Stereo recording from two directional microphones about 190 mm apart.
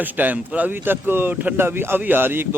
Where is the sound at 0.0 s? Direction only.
10° right (ahead or behind).